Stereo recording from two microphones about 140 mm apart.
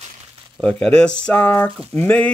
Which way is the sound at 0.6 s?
5° left (ahead or behind).